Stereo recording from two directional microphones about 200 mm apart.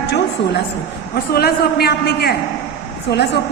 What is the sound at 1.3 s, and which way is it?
A man's voice, 50° left (ahead or behind).